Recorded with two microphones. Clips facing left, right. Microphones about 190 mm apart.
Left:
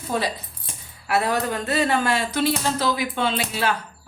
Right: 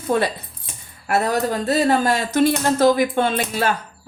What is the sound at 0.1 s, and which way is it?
Speech, 60° right (ahead or behind).